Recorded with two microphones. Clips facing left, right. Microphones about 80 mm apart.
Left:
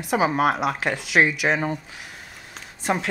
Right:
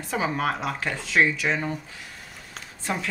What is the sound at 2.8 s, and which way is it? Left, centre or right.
Speech, left.